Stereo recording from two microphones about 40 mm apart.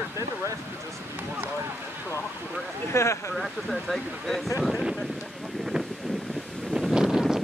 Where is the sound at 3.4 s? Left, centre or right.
Centre.